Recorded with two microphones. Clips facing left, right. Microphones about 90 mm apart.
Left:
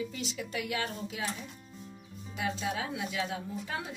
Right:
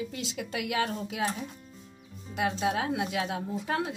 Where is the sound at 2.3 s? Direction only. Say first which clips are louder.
Right 5 dB; 60° right (ahead or behind).